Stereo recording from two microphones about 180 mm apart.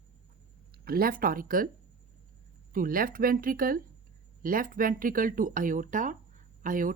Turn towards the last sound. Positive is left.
turn(degrees=-50)  # may be behind; listen again after turning